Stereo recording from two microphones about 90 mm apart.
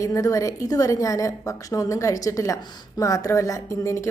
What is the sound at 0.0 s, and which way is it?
A woman's voice, 40° left (ahead or behind).